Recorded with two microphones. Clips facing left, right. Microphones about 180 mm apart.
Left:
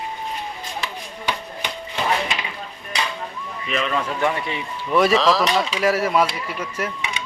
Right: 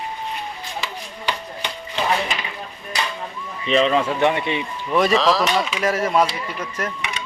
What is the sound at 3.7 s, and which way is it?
Speech, 30° right (ahead or behind).